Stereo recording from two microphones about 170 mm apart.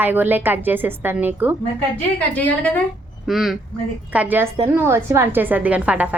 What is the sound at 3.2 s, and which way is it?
A woman's voice, centre (ahead or behind).